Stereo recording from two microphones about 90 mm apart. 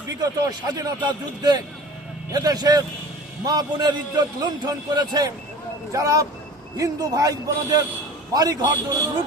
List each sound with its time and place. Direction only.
0.1 s a man's voice: 40° right (ahead or behind)
5.9 s a man's voice: 40° right (ahead or behind)